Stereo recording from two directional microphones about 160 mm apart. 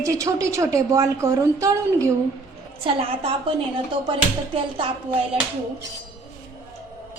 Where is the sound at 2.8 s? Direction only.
35° right (ahead or behind).